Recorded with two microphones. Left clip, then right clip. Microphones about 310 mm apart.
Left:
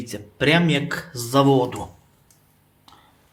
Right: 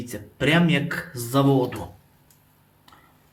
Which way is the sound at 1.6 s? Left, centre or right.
Centre.